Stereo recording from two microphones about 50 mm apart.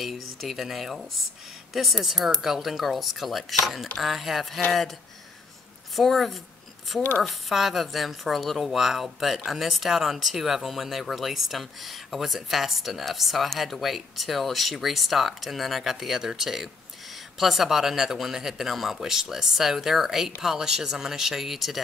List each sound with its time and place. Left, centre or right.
0.0 s a woman's voice: centre
5.9 s a woman's voice: centre
7.0 s speech: left
7.2 s a woman's voice: centre